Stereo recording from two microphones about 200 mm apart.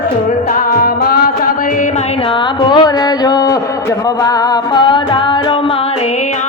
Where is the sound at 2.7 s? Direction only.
20° left (ahead or behind).